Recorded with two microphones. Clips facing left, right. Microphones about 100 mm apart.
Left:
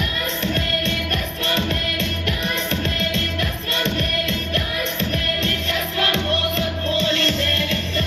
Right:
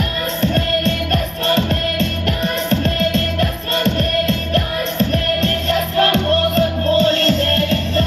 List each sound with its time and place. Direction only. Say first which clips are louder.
0.5 s music: right 6 dB; 40° right (ahead or behind)